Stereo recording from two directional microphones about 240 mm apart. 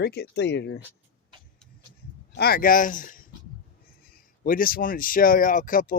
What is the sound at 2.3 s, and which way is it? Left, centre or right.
Speech, left.